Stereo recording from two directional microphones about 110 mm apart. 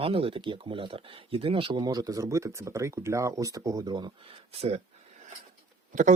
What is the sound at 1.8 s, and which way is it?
Speech, 35° right (ahead or behind).